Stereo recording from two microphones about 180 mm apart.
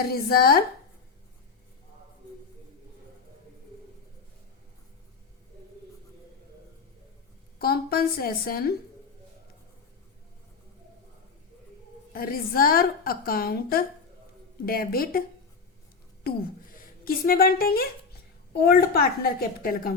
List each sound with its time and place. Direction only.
0.1 s a woman's voice: 55° left (ahead or behind)
7.6 s a woman's voice: 55° left (ahead or behind)
12.1 s a woman's voice: 55° left (ahead or behind)
16.3 s a woman's voice: 60° left (ahead or behind)